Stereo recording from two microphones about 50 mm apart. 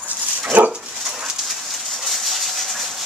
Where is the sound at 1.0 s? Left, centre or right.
Centre.